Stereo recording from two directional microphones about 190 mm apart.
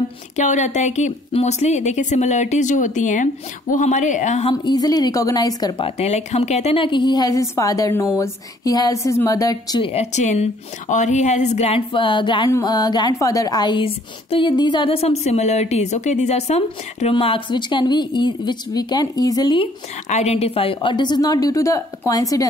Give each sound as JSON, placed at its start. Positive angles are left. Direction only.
{"t": 0.4, "sound": "a woman's voice", "side_deg": 40}